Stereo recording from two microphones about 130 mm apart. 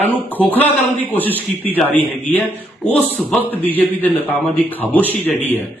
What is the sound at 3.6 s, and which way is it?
A man's voice, 15° left (ahead or behind).